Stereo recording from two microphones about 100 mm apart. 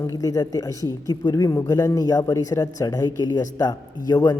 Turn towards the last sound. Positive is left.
turn(degrees=40)  # may be behind; listen again after turning